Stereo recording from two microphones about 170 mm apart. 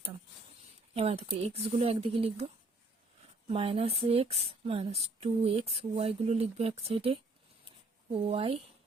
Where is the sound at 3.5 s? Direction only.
35° right (ahead or behind).